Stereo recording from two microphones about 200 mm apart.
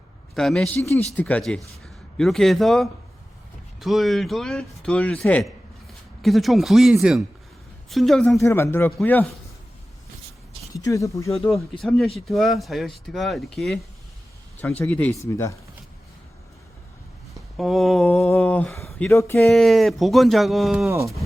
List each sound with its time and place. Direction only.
0.3 s speech: centre (ahead or behind)
0.8 s speech: 15° left (ahead or behind)
8.4 s speech: 10° left (ahead or behind)
10.8 s speech: 15° left (ahead or behind)
11.8 s speech: centre (ahead or behind)
17.3 s a sound: centre (ahead or behind)
19.1 s speech: 5° left (ahead or behind)